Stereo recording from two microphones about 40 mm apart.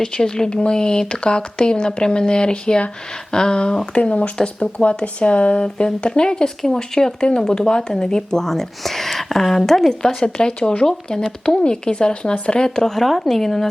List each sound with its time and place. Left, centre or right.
0.0 s speech: centre
10.2 s speech: left